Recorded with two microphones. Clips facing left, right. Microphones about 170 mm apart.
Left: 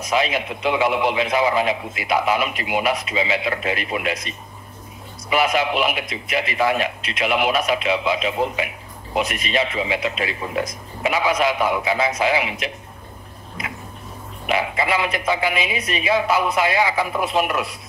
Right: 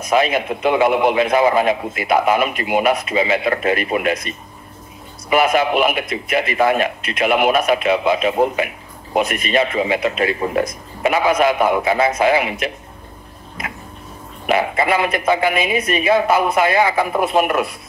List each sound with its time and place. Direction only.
0.0 s a man's voice: 55° right (ahead or behind)
5.3 s a man's voice: 50° right (ahead or behind)
14.4 s a man's voice: 50° right (ahead or behind)